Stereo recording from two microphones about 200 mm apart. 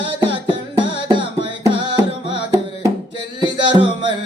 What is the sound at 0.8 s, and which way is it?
Music, 25° right (ahead or behind).